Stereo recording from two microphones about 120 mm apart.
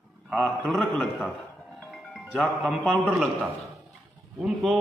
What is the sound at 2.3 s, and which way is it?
Speech, 5° left (ahead or behind).